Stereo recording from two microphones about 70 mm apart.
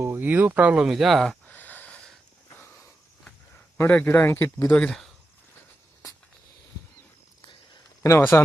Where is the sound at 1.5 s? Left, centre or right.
Left.